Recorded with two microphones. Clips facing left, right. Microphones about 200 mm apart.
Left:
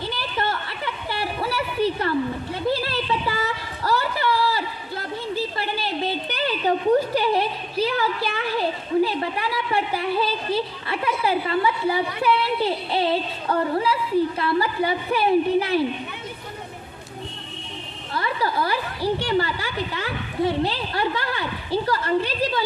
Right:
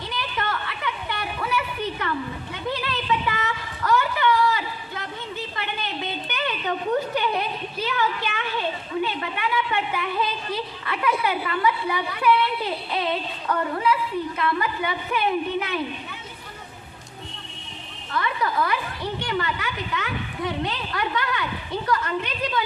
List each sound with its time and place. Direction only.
0.1 s a sound: 30° left (ahead or behind)
14.3 s a woman's voice: 30° left (ahead or behind)
18.1 s a woman's voice: 30° left (ahead or behind)